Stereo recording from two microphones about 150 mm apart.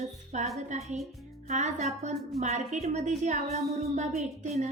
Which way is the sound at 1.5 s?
50° right (ahead or behind).